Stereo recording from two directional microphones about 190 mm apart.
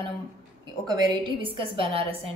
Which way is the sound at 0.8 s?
20° right (ahead or behind).